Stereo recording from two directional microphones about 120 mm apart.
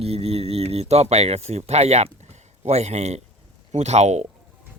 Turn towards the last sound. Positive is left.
turn(degrees=-65)  # may be behind; listen again after turning